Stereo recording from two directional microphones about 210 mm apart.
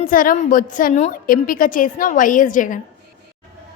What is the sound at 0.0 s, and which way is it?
A woman's voice, 40° left (ahead or behind).